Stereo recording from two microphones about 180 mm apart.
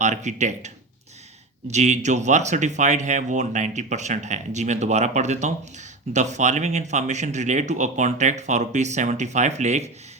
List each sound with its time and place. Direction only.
0.0 s speech: 40° right (ahead or behind)